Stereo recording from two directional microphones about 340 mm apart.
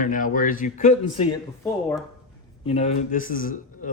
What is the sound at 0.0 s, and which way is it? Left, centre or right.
A man's voice, left.